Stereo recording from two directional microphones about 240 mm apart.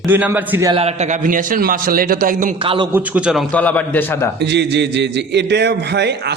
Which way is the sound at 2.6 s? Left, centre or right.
Right.